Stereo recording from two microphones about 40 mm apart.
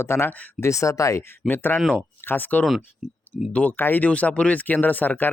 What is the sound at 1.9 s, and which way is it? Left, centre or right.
Speech, left.